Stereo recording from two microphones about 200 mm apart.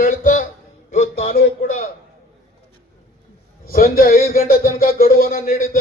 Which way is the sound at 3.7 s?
45° left (ahead or behind).